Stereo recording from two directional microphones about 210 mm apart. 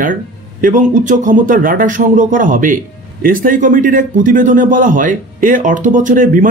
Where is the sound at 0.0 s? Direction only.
40° right (ahead or behind).